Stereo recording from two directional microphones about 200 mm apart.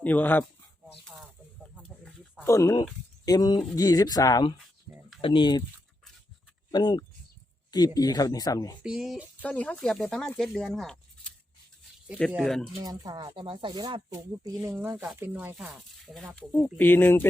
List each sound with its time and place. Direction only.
0.0 s speech: 10° left (ahead or behind)
1.0 s snake: centre (ahead or behind)
2.4 s speech: 15° left (ahead or behind)
4.9 s a sound: 10° right (ahead or behind)
5.2 s speech: 25° left (ahead or behind)
6.7 s speech: 20° left (ahead or behind)
8.8 s speech: 5° right (ahead or behind)
9.4 s speech: 5° left (ahead or behind)
12.3 s speech: centre (ahead or behind)
12.8 s speech: 20° right (ahead or behind); by 17.2 s 10° left (ahead or behind)